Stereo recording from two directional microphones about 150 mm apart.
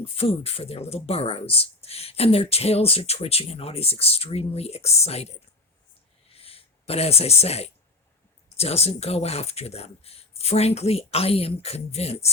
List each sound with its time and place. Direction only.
0.0 s speech: 40° left (ahead or behind)
6.3 s a sound: 40° left (ahead or behind)
8.5 s speech: 45° left (ahead or behind)